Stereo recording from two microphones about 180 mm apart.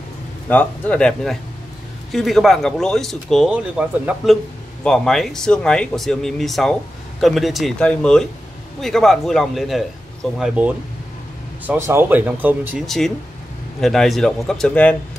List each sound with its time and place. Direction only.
0.5 s speech: 10° left (ahead or behind); by 12.8 s 10° right (ahead or behind)
12.8 s speech: centre (ahead or behind)